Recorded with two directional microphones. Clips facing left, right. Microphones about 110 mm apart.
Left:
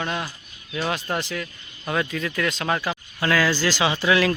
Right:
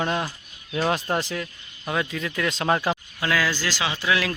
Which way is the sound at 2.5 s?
25° right (ahead or behind).